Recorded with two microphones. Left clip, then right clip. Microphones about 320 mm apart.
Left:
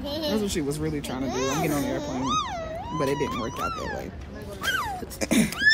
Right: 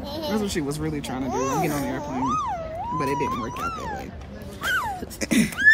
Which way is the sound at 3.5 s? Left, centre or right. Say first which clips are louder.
Right 1 dB; centre.